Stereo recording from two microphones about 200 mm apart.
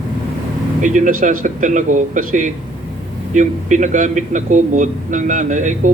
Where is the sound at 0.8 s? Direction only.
40° right (ahead or behind).